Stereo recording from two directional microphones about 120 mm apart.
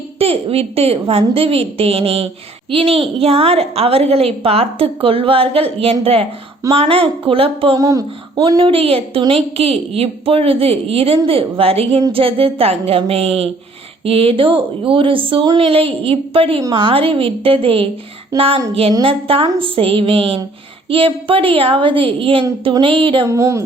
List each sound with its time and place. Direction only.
0.2 s a woman's voice: 55° right (ahead or behind)
7.8 s speech: 30° right (ahead or behind)
8.6 s a woman's voice: 50° right (ahead or behind)
23.2 s music: 25° right (ahead or behind)